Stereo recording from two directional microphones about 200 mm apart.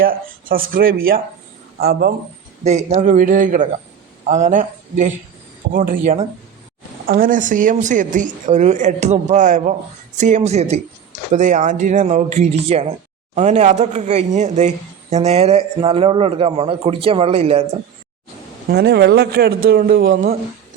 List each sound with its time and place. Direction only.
0.0 s a man's voice: 45° right (ahead or behind)
2.6 s a man's voice: 35° right (ahead or behind)
18.7 s a man's voice: 55° right (ahead or behind)